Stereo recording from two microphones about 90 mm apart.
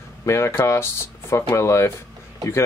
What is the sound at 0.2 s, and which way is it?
Speech, 30° left (ahead or behind).